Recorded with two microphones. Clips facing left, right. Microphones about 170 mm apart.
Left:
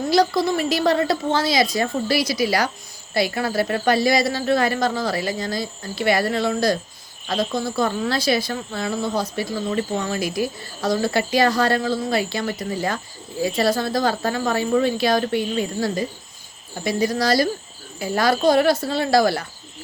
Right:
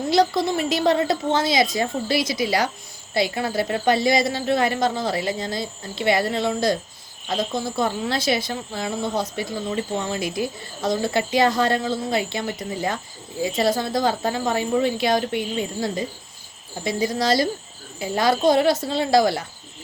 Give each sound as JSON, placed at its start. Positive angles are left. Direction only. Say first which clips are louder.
{"t": 0.1, "sound": "speech", "louder": "left 1 dB", "side_deg": -20}